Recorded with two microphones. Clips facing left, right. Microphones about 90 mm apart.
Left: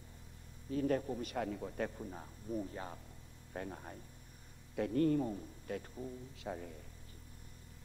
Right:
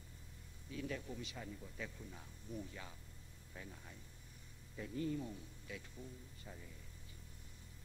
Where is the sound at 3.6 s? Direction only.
55° left (ahead or behind).